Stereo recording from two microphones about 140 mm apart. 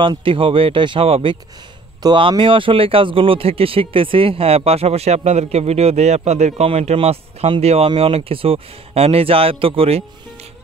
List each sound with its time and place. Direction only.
0.0 s a man's voice: 40° right (ahead or behind)